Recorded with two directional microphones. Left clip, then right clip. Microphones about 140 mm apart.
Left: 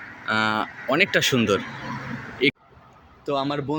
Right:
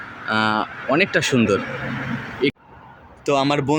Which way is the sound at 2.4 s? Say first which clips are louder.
Even; 5° left (ahead or behind).